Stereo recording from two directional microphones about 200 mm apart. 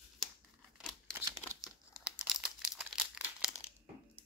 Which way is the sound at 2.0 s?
5° right (ahead or behind).